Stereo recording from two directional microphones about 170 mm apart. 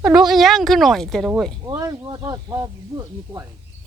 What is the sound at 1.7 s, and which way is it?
Speech, 25° right (ahead or behind).